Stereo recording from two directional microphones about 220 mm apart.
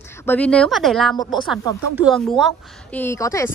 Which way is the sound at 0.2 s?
10° left (ahead or behind).